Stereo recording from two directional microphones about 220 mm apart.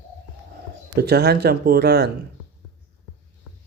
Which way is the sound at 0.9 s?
45° right (ahead or behind).